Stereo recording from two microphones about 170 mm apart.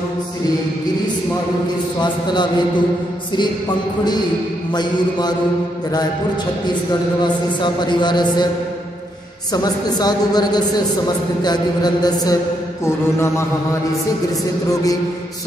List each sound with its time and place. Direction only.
6.9 s a man's voice: 25° left (ahead or behind)
9.5 s a man's voice: 25° left (ahead or behind)
12.8 s mantra: 15° left (ahead or behind)